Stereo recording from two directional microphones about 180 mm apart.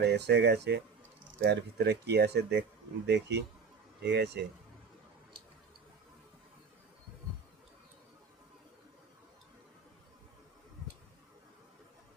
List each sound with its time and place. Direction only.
0.0 s speech: 70° right (ahead or behind)